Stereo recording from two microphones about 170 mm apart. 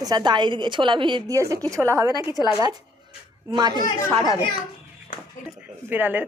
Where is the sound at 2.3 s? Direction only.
25° left (ahead or behind).